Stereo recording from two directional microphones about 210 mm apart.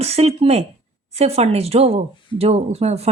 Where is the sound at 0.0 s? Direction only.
30° right (ahead or behind).